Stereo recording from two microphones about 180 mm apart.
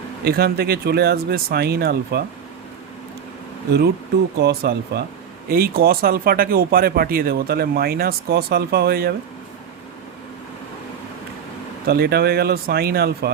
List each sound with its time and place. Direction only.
0.3 s speech: 60° right (ahead or behind)
3.7 s speech: 65° right (ahead or behind)
11.9 s speech: 60° right (ahead or behind)